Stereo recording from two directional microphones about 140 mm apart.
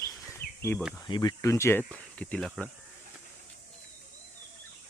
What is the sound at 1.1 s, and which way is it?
Speech, 35° left (ahead or behind).